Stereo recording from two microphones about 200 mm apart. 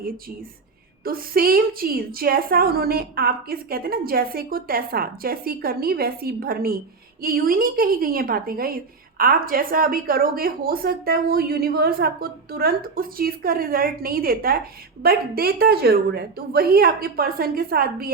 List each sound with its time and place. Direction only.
1.0 s a woman's voice: 45° right (ahead or behind)